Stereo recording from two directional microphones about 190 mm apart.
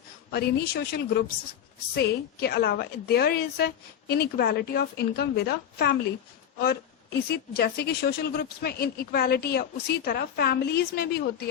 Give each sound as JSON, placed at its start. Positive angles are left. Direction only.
{"t": 0.3, "sound": "a woman's voice", "side_deg": 55}